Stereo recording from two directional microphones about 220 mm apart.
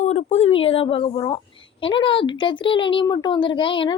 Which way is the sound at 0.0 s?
30° left (ahead or behind).